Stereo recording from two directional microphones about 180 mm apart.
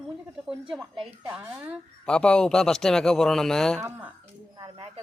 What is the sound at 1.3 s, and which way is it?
Speech, 10° right (ahead or behind).